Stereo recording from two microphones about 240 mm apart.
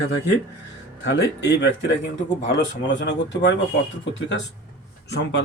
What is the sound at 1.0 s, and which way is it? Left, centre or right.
Speech, left.